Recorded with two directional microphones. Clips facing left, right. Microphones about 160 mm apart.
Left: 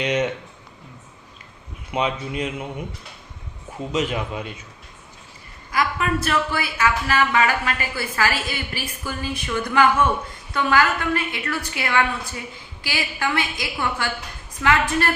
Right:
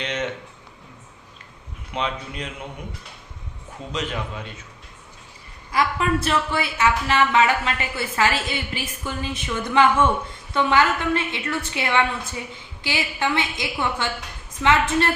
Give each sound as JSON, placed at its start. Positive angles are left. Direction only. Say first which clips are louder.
{"t": 0.0, "sound": "a sound", "louder": "left 6 dB", "side_deg": 10}
{"t": 1.9, "sound": "a man's voice", "louder": "left 4 dB", "side_deg": 10}
{"t": 5.7, "sound": "a woman's voice", "louder": "right 1 dB", "side_deg": -30}